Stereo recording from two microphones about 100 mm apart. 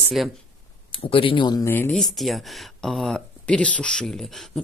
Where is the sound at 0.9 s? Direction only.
65° left (ahead or behind).